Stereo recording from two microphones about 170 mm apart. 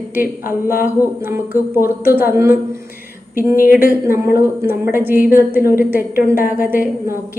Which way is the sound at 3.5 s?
55° left (ahead or behind).